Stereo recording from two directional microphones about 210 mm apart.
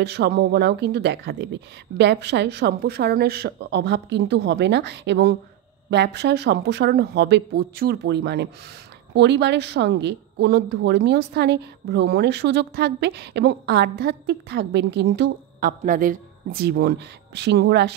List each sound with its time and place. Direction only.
0.0 s a woman's voice: 50° right (ahead or behind)
15.8 s speech: 40° right (ahead or behind)